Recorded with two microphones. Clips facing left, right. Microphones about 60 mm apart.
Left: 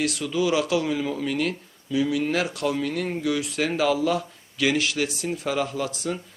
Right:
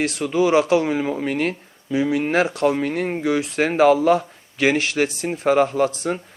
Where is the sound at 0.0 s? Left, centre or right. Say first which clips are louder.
Right 5 dB; right.